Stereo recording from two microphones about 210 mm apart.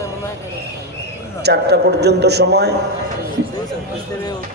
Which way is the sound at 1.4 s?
50° right (ahead or behind).